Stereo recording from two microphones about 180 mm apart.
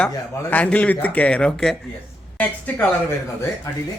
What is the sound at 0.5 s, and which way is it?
Speech, 10° left (ahead or behind).